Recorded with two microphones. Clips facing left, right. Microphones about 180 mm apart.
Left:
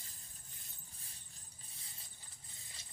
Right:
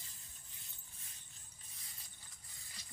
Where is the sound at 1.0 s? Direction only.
30° left (ahead or behind).